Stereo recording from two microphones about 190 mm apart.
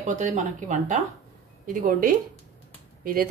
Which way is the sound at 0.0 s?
40° right (ahead or behind).